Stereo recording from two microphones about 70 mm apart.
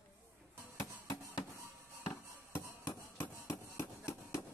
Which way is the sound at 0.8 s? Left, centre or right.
Left.